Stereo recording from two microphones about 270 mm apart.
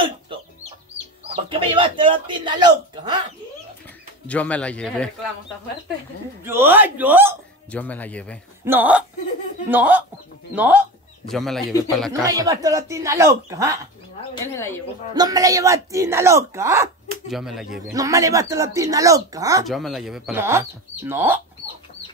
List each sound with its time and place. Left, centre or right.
1.3 s speech: centre
4.3 s speech: centre
6.4 s speech: centre
7.7 s speech: centre
8.6 s speech: centre
12.1 s speech: centre
14.3 s speech: centre
15.1 s speech: centre
17.9 s speech: centre
19.6 s speech: centre